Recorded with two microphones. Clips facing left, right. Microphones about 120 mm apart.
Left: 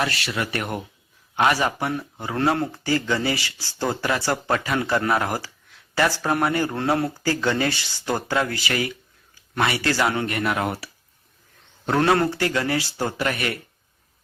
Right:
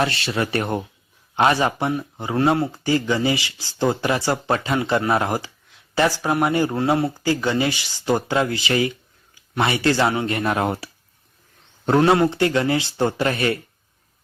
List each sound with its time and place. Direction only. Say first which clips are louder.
0.0 s speech: right 4 dB; 30° right (ahead or behind)
11.9 s speech: right 3 dB; 15° right (ahead or behind)